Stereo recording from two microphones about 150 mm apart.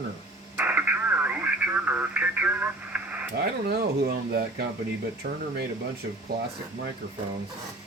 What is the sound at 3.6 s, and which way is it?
Speech, 90° right.